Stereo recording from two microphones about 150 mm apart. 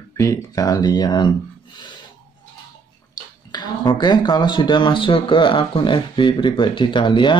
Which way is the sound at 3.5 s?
30° left (ahead or behind).